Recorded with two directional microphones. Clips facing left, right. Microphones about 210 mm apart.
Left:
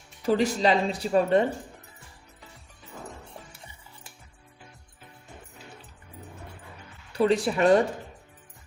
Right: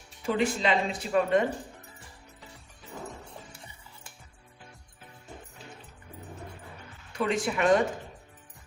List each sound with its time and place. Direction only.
0.3 s speech: 40° left (ahead or behind)
7.1 s speech: 35° left (ahead or behind)